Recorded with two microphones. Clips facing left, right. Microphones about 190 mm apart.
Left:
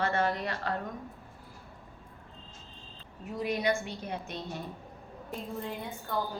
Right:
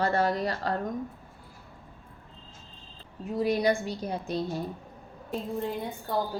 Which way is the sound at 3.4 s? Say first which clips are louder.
Right 5 dB; 35° right (ahead or behind).